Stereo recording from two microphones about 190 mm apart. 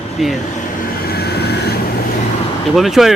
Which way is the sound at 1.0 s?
55° left (ahead or behind).